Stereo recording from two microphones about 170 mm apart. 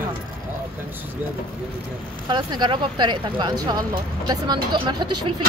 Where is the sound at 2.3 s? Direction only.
25° right (ahead or behind).